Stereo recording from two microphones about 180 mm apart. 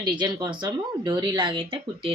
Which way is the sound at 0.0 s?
25° right (ahead or behind).